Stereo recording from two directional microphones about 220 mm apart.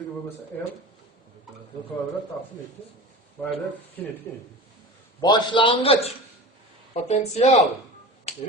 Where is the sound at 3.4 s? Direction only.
Centre (ahead or behind).